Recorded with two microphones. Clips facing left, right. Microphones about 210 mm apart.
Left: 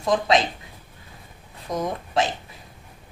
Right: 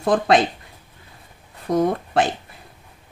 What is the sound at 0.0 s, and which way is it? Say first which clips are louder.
Speech: right 3 dB; 55° right (ahead or behind).